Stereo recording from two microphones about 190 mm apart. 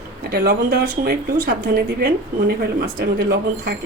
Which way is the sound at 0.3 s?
55° right (ahead or behind).